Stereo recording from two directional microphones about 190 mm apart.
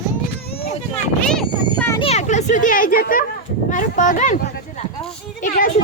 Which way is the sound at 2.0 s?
35° left (ahead or behind).